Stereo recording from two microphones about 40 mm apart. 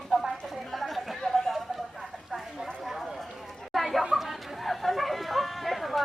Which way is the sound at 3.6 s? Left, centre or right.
Centre.